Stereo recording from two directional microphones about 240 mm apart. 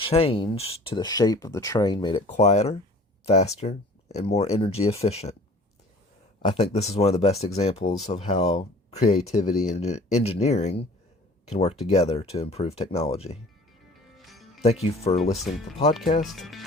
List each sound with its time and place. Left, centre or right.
0.0 s speech: left
2.2 s speech: left
6.4 s speech: left
14.3 s music: centre
14.6 s speech: left
16.2 s speech: centre